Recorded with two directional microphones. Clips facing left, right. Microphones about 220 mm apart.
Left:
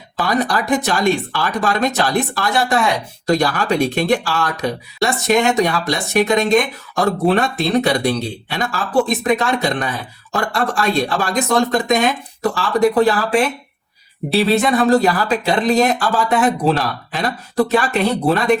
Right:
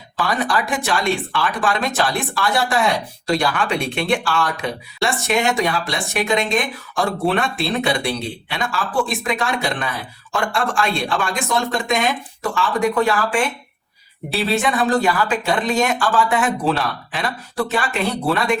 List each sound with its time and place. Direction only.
0.3 s speech: 40° left (ahead or behind)